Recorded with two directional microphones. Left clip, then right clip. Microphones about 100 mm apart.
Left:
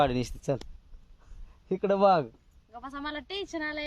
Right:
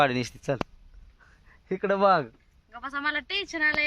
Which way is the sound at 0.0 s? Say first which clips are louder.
Right 3 dB; 10° right (ahead or behind).